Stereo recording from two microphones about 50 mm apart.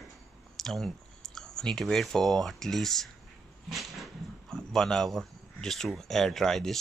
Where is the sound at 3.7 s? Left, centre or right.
Centre.